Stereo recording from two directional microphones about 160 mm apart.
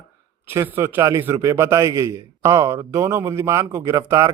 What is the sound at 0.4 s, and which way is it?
Speech, 15° right (ahead or behind).